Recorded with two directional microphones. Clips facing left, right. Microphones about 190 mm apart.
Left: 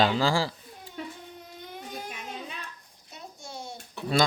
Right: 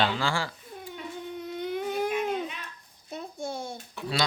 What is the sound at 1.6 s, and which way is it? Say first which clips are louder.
Baby cry: right 11 dB; 70° right (ahead or behind).